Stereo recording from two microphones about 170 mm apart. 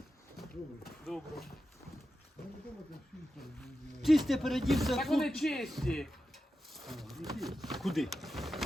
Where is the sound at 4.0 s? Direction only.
Centre (ahead or behind).